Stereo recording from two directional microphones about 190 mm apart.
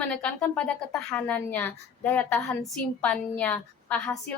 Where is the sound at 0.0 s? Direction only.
5° left (ahead or behind).